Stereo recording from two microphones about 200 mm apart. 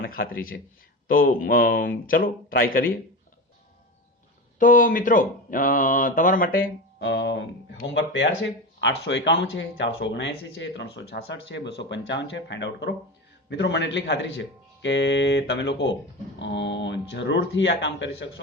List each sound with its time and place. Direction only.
0.0 s speech: 45° left (ahead or behind)
4.6 s speech: 45° left (ahead or behind)
7.0 s speech: 60° left (ahead or behind)